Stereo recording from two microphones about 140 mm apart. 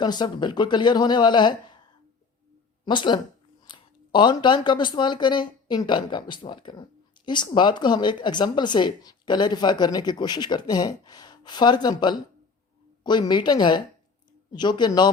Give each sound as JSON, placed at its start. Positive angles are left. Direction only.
{"t": 0.0, "sound": "speech", "side_deg": 30}
{"t": 2.8, "sound": "speech", "side_deg": 35}